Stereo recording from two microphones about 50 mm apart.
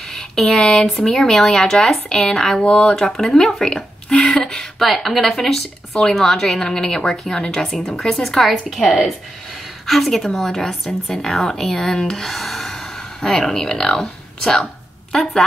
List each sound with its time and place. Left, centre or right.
0.1 s speech: centre
2.6 s speech: left
3.1 s a woman's voice: centre